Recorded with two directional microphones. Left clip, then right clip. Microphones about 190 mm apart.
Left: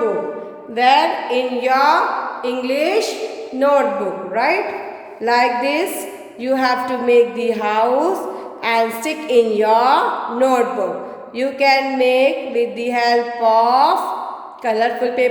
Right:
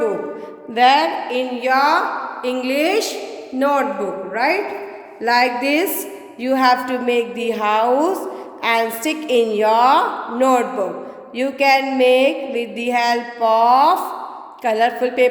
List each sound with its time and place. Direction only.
0.8 s music: 35° right (ahead or behind)
1.3 s a woman's voice: 20° right (ahead or behind)
2.4 s music: 40° right (ahead or behind)
3.6 s a woman's voice: 30° right (ahead or behind)
5.2 s music: 30° right (ahead or behind)